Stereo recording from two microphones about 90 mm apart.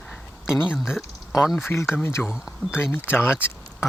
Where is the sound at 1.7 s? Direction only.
30° left (ahead or behind).